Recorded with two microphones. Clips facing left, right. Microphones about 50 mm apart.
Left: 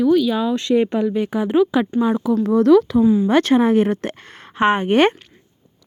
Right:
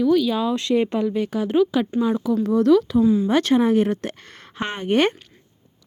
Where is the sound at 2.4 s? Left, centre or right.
Left.